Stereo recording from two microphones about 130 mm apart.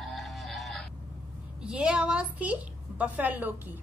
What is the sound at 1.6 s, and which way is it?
A woman's voice, 5° right (ahead or behind).